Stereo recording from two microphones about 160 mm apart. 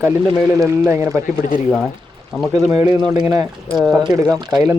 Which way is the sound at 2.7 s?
20° right (ahead or behind).